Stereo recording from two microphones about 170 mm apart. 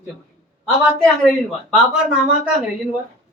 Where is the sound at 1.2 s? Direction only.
Centre (ahead or behind).